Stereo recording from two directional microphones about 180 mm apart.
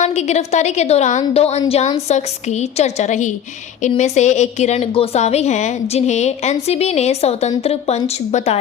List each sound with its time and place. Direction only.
0.0 s a woman's voice: 40° left (ahead or behind)